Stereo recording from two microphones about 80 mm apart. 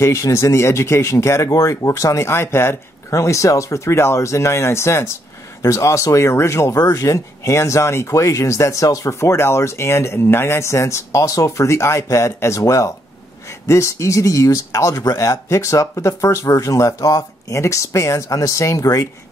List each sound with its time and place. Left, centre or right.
0.0 s speech: left